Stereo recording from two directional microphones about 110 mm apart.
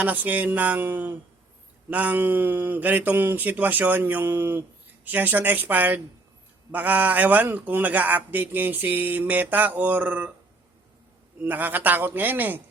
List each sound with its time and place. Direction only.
0.0 s a man's voice: 15° right (ahead or behind)
11.4 s a man's voice: 15° right (ahead or behind)